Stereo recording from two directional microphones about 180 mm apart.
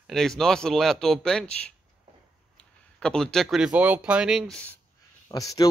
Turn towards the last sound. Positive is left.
turn(degrees=20)  # may be behind; listen again after turning